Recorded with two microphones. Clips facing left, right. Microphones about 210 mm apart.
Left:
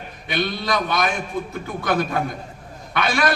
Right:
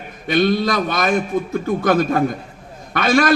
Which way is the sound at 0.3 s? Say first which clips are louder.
Right 7 dB; 50° right (ahead or behind).